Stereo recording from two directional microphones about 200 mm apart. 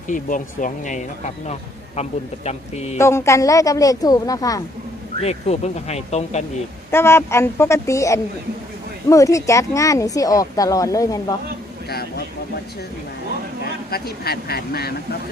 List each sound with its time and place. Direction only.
0.1 s speech: 40° left (ahead or behind)
3.0 s speech: 15° left (ahead or behind)
5.2 s speech: 30° left (ahead or behind)
6.9 s speech: 10° left (ahead or behind)
11.9 s speech: 50° left (ahead or behind)
13.9 s speech: 50° left (ahead or behind)